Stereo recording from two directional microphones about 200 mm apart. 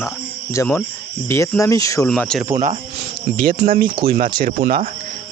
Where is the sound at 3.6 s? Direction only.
45° right (ahead or behind).